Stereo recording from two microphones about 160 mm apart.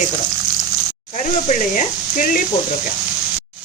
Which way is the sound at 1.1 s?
50° left (ahead or behind).